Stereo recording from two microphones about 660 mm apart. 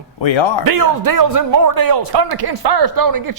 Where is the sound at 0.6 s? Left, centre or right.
Right.